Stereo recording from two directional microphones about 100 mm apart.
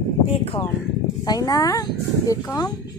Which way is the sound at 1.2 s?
40° left (ahead or behind).